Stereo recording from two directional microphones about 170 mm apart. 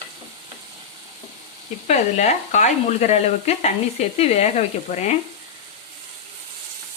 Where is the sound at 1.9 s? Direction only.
45° left (ahead or behind).